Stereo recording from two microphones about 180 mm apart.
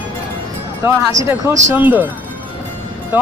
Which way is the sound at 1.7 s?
10° right (ahead or behind).